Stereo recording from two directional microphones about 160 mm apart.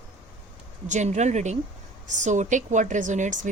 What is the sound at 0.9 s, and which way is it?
Speech, 50° right (ahead or behind).